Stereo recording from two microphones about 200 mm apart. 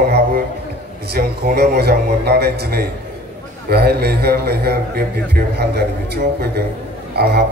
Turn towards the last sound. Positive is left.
turn(degrees=-55)  # may be behind; listen again after turning